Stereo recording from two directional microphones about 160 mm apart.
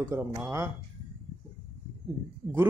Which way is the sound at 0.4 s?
15° right (ahead or behind).